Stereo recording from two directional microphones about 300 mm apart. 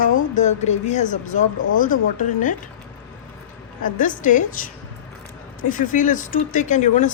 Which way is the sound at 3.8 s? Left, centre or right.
Left.